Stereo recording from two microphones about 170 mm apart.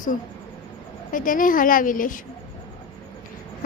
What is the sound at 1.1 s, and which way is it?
A woman's voice, 50° left (ahead or behind).